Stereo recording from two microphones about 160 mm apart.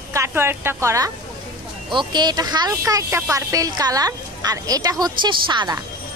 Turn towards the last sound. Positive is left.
turn(degrees=-30)  # may be behind; listen again after turning